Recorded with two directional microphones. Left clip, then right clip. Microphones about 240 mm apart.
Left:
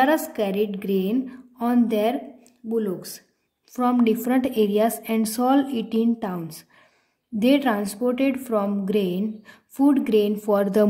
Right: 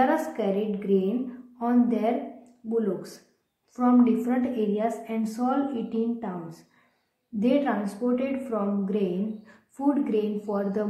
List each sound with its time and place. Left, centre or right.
0.0 s a woman's voice: left
3.7 s a woman's voice: left
7.3 s a woman's voice: left